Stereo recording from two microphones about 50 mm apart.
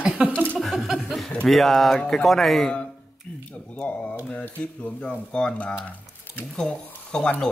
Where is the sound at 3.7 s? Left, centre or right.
Left.